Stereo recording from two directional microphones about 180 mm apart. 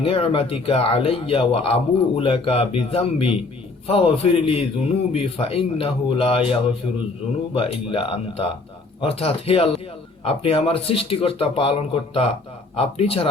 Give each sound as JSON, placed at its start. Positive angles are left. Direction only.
{"t": 0.0, "sound": "a man's voice", "side_deg": 30}